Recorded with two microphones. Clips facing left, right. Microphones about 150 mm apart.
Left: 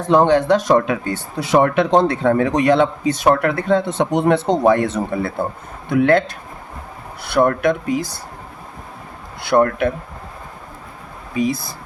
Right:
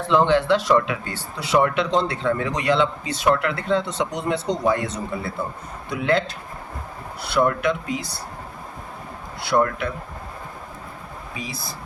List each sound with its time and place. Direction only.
0.0 s speech: 45° left (ahead or behind)
7.3 s speech: 50° left (ahead or behind)
9.4 s speech: 50° left (ahead or behind)
11.3 s speech: 50° left (ahead or behind)